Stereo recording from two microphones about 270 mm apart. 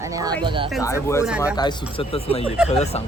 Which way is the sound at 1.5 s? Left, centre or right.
Centre.